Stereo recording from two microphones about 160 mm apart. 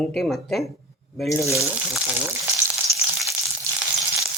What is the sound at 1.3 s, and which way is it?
Speech, 20° left (ahead or behind).